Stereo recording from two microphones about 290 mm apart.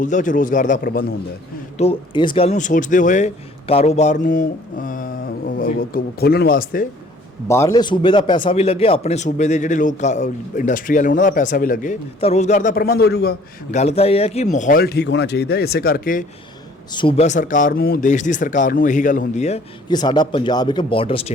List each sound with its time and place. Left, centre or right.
0.0 s a man's voice: left
1.8 s a man's voice: centre
7.4 s a man's voice: centre; by 16.2 s left
16.9 s a man's voice: centre